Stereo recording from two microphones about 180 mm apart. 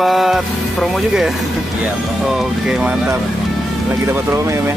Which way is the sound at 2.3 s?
5° right (ahead or behind).